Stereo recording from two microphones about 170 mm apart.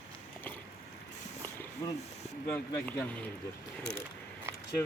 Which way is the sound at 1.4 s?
10° left (ahead or behind).